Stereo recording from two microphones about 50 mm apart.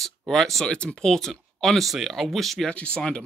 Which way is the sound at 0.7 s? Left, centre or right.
Centre.